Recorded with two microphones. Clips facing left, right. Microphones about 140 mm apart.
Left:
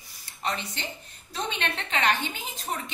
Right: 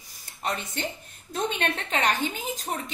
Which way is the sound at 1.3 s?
50° right (ahead or behind).